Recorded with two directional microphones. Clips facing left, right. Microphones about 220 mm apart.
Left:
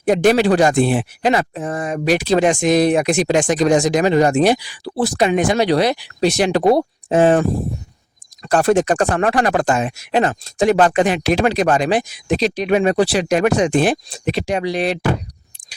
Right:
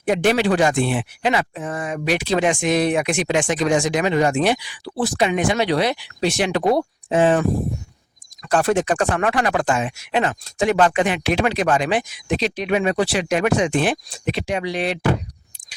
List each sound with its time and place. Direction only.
0.0 s speech: 40° left (ahead or behind)